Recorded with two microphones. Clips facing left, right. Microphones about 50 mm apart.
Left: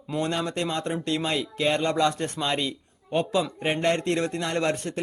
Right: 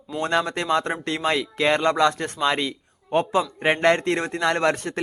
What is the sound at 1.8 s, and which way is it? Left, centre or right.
A man's voice, right.